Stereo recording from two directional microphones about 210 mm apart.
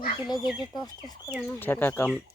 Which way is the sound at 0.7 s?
20° left (ahead or behind).